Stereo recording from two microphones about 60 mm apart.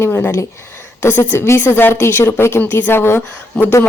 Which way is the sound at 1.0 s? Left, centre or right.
Left.